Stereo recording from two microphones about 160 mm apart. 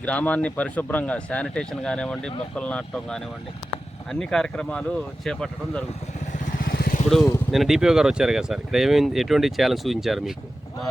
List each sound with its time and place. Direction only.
0.0 s speech: 10° left (ahead or behind)
6.3 s vehicle: 60° left (ahead or behind)
7.5 s speech: centre (ahead or behind)